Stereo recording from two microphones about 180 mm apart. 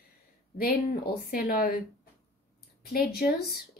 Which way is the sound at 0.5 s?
55° left (ahead or behind).